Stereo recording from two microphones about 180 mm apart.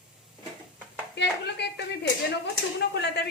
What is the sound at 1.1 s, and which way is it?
Speech, 70° left (ahead or behind).